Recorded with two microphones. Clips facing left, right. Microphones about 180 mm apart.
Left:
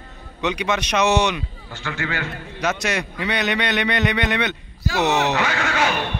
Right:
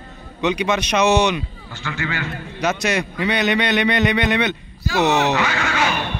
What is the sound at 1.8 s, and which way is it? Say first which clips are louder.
Speech: right 1 dB; 50° left (ahead or behind).